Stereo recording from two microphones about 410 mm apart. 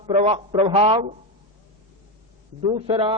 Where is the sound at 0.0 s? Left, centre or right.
Centre.